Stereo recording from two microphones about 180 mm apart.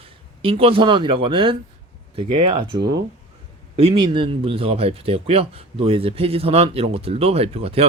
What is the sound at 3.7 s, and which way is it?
Speech, 30° right (ahead or behind).